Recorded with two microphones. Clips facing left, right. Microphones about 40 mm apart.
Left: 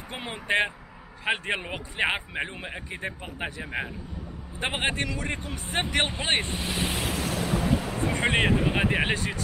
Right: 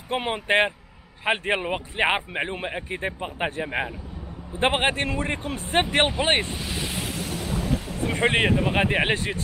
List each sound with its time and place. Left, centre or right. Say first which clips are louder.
0.1 s a man's voice: right 5 dB; right
4.6 s speech: right 6 dB; right
6.5 s vehicle: left 1 dB; centre
8.1 s a man's voice: right 3 dB; centre